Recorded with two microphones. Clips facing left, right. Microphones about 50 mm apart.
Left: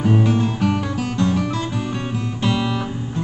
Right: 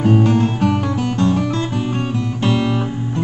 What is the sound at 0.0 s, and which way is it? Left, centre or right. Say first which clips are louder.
Music: right 3 dB; right.